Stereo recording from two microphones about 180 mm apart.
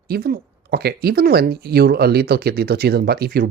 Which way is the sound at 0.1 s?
60° right (ahead or behind).